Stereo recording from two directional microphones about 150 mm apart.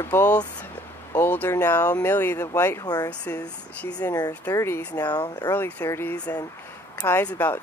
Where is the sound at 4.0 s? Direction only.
25° left (ahead or behind).